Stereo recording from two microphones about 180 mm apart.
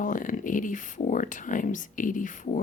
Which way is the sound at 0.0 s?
45° left (ahead or behind).